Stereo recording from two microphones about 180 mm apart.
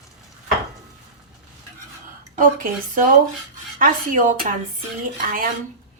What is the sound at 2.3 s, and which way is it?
A woman's voice, 45° right (ahead or behind).